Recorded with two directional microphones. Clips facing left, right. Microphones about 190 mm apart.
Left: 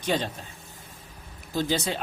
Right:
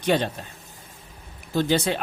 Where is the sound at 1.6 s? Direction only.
65° right (ahead or behind).